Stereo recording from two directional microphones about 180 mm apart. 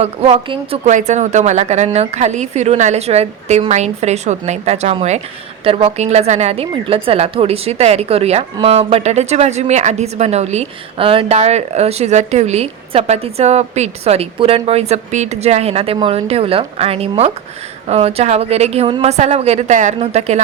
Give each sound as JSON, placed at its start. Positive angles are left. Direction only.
{"t": 0.0, "sound": "speech", "side_deg": -35}
{"t": 0.9, "sound": "speech", "side_deg": -40}